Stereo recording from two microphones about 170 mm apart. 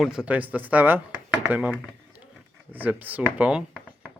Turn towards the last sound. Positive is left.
turn(degrees=-5)  # may be behind; listen again after turning